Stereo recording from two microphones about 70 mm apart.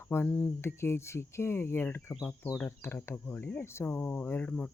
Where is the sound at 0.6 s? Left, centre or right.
Left.